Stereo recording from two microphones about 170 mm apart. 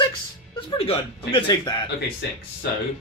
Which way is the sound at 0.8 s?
35° left (ahead or behind).